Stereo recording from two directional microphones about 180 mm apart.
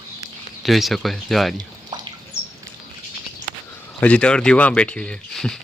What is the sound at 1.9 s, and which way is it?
Bird, 20° right (ahead or behind).